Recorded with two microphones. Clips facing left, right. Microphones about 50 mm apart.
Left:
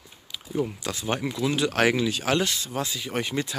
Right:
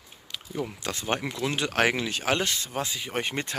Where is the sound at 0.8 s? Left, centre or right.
Right.